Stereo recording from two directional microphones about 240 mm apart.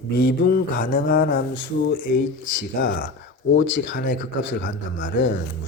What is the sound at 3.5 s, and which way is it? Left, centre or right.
Speech, left.